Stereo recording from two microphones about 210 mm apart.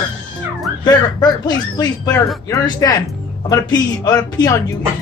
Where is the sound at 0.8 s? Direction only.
20° left (ahead or behind).